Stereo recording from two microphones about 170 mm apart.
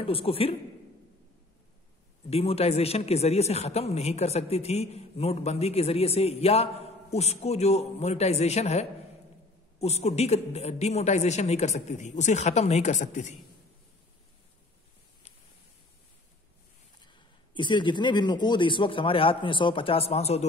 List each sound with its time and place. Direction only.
0.0 s a man's voice: 35° left (ahead or behind)
2.2 s a man's voice: 35° left (ahead or behind)
17.0 s a man's voice: 25° left (ahead or behind)